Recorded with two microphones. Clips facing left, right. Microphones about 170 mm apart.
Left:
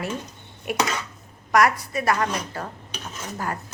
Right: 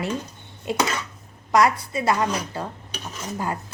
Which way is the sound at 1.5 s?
30° right (ahead or behind).